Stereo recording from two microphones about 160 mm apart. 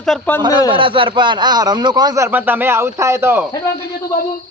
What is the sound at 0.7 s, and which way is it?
A man's voice, 35° right (ahead or behind).